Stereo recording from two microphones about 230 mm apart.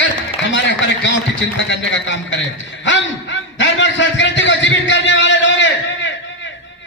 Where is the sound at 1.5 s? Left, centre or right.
Left.